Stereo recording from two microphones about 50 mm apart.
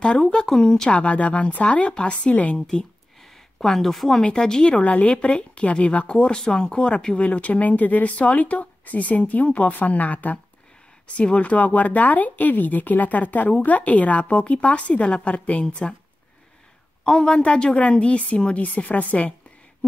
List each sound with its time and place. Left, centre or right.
0.5 s speech: centre
0.9 s a woman's voice: left
2.6 s speech: centre
4.2 s a woman's voice: centre
7.2 s a woman's voice: left
17.0 s a woman's voice: centre